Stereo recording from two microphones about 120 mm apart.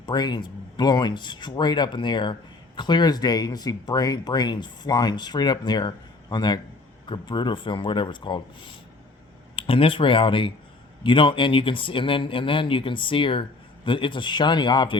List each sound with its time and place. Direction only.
0.0 s speech: 40° left (ahead or behind)